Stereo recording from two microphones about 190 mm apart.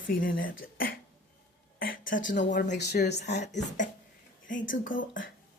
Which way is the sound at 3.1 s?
60° left (ahead or behind).